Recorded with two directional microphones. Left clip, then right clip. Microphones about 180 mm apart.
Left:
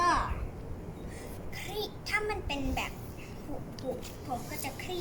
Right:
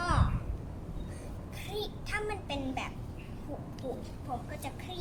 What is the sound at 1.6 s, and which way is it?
A child's voice, 15° right (ahead or behind).